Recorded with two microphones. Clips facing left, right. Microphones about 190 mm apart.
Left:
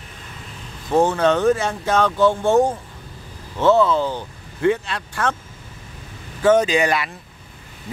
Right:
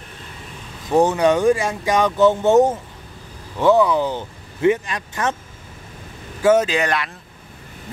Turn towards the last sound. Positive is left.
turn(degrees=5)  # may be behind; listen again after turning